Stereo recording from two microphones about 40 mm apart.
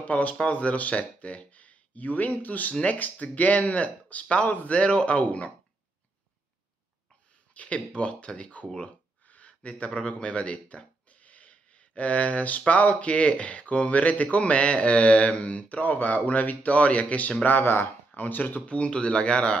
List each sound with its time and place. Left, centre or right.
0.0 s speech: left
7.5 s speech: left
17.4 s speech: left
18.1 s speech: left
18.7 s speech: left